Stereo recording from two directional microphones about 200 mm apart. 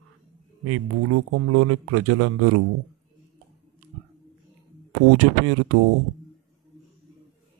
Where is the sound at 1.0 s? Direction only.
90° right.